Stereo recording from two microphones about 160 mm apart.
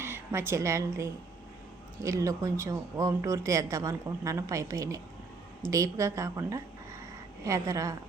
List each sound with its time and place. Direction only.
0.0 s a woman's voice: 15° right (ahead or behind)